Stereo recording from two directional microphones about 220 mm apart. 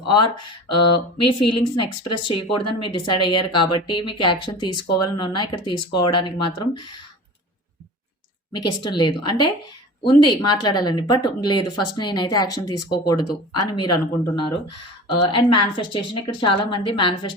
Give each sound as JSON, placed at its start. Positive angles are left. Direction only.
{"t": 0.0, "sound": "speech", "side_deg": 20}
{"t": 1.3, "sound": "speech", "side_deg": 20}
{"t": 8.5, "sound": "speech", "side_deg": 20}
{"t": 12.6, "sound": "speech", "side_deg": 90}
{"t": 12.9, "sound": "speech", "side_deg": 20}